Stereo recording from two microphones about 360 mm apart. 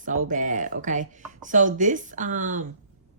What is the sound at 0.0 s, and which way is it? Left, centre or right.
Speech, right.